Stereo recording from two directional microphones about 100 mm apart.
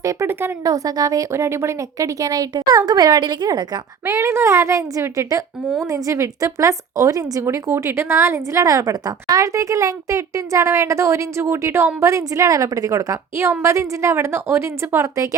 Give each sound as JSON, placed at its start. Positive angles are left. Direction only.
{"t": 0.0, "sound": "a woman's voice", "side_deg": -30}
{"t": 4.0, "sound": "a woman's voice", "side_deg": -30}